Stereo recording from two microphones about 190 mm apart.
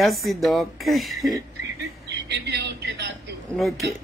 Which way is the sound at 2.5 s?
60° right (ahead or behind).